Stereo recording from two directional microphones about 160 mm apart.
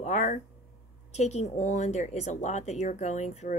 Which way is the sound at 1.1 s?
45° left (ahead or behind).